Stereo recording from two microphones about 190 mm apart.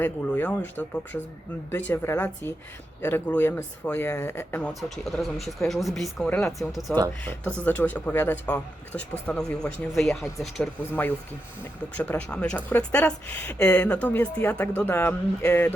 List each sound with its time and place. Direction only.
0.0 s speech: 10° left (ahead or behind)
4.8 s speech: centre (ahead or behind)
7.3 s speech: 10° left (ahead or behind)